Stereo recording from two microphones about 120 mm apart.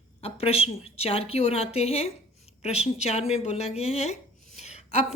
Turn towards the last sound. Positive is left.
turn(degrees=65)  # may be behind; listen again after turning